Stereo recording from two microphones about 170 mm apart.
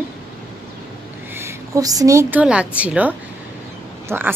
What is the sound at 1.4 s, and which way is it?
A woman's voice, 20° right (ahead or behind).